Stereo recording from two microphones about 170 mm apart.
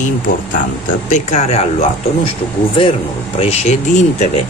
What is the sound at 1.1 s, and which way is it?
Speech, 40° left (ahead or behind).